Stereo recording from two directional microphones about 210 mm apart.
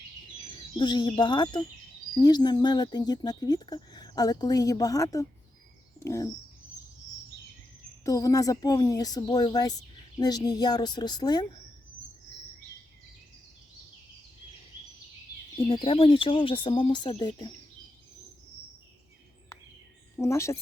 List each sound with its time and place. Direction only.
0.8 s speech: 20° left (ahead or behind)
8.0 s speech: 15° left (ahead or behind)
15.7 s speech: 25° left (ahead or behind)
20.1 s a woman's voice: 15° left (ahead or behind)